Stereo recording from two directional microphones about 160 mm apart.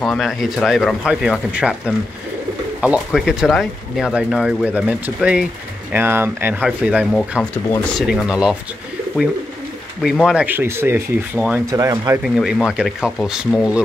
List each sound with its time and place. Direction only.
0.0 s speech: centre (ahead or behind)
2.8 s speech: 5° right (ahead or behind)
10.0 s speech: 5° right (ahead or behind)
11.7 s speech: 25° right (ahead or behind)
12.2 s speech: centre (ahead or behind)